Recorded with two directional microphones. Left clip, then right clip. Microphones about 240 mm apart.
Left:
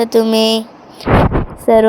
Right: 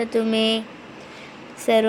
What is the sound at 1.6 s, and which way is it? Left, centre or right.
Speech, centre.